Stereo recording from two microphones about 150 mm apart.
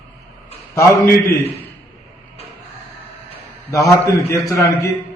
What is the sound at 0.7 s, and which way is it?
Speech, 20° left (ahead or behind).